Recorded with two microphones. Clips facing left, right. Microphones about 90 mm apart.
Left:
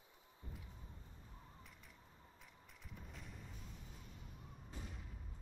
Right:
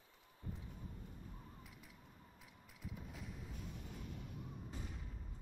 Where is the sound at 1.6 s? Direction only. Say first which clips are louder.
Right 3 dB; 5° right (ahead or behind).